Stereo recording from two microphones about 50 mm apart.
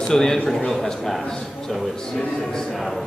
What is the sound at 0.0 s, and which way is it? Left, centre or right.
A man's voice, centre.